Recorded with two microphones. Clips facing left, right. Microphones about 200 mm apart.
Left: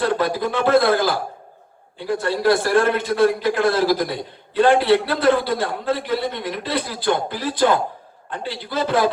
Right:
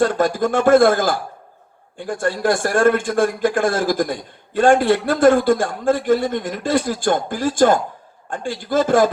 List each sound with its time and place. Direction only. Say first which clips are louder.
0.0 s a man's voice: right 3 dB; 45° right (ahead or behind)